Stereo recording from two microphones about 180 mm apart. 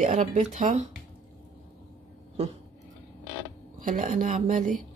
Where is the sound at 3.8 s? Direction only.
45° right (ahead or behind).